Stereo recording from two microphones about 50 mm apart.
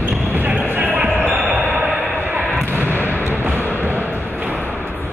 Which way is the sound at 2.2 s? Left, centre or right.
Right.